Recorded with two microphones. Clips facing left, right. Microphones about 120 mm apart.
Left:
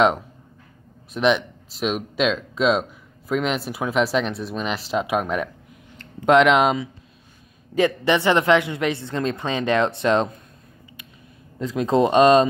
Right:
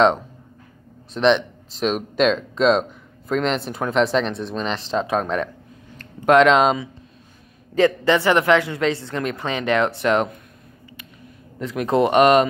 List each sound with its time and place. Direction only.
1.1 s speech: 5° left (ahead or behind)
5.9 s speech: 20° left (ahead or behind)
11.6 s speech: 20° left (ahead or behind)